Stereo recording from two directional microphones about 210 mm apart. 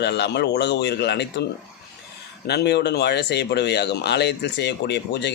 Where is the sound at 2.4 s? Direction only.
50° left (ahead or behind).